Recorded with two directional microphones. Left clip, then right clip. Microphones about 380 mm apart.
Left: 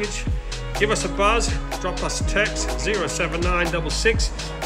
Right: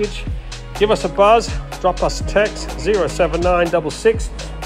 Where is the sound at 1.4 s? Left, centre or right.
Centre.